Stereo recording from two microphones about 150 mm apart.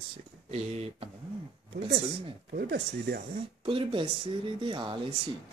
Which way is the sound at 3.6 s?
35° right (ahead or behind).